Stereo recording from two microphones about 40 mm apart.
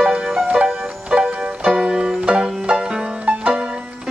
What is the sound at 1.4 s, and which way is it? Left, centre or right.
Music, centre.